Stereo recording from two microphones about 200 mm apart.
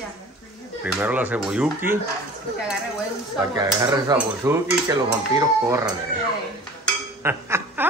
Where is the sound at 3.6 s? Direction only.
20° right (ahead or behind).